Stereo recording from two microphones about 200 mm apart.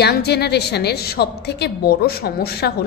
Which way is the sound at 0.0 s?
55° left (ahead or behind).